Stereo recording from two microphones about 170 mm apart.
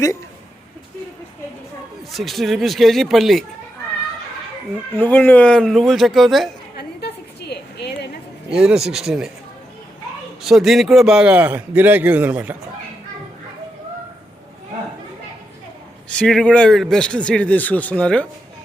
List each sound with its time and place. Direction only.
2.1 s a man's voice: centre (ahead or behind)
4.9 s a man's voice: 10° left (ahead or behind)
6.7 s a sound: 75° left (ahead or behind)
8.4 s a man's voice: 5° right (ahead or behind)
10.4 s a man's voice: centre (ahead or behind)
16.1 s a man's voice: 5° left (ahead or behind)